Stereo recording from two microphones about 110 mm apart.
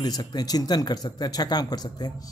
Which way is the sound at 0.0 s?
35° left (ahead or behind).